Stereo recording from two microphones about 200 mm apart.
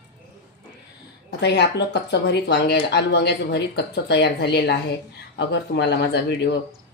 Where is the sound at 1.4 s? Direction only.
55° left (ahead or behind).